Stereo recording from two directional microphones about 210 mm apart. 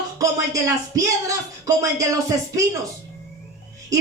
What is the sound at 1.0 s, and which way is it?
Speech, 15° right (ahead or behind).